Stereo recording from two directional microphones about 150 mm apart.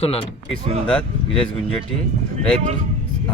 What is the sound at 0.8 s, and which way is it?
Speech, 5° left (ahead or behind).